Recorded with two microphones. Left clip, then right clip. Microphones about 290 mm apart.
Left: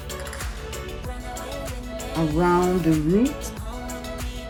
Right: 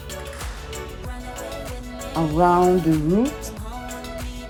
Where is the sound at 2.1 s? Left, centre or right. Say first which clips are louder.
Right 4 dB; centre.